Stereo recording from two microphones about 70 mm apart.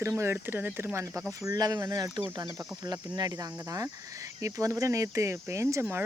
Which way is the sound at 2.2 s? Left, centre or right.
Right.